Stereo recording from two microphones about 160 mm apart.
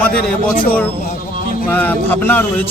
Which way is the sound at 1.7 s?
10° left (ahead or behind).